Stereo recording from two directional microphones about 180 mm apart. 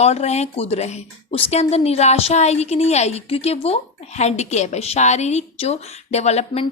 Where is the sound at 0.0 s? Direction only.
35° left (ahead or behind).